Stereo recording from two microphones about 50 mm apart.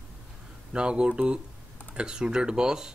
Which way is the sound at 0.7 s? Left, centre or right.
Centre.